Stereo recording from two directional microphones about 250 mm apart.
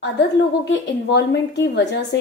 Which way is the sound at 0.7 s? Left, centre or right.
Left.